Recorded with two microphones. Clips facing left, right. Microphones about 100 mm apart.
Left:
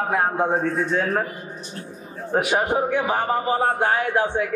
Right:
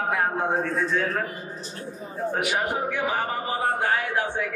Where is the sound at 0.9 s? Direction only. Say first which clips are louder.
Left 3 dB; 35° left (ahead or behind).